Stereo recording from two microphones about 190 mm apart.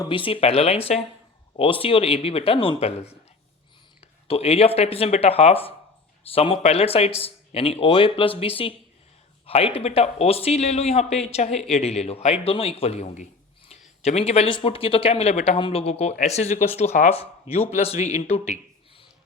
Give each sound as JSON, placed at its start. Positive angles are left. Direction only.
{"t": 0.0, "sound": "speech", "side_deg": 25}